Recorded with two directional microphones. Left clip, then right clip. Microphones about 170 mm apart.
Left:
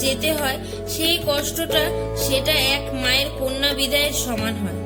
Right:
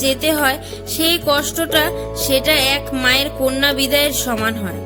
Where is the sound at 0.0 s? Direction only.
50° right (ahead or behind).